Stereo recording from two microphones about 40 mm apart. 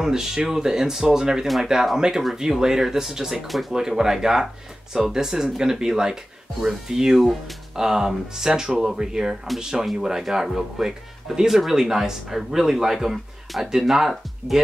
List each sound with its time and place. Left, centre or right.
0.0 s speech: centre
3.3 s speech: centre
3.7 s speech: centre
7.2 s speech: centre
7.7 s speech: centre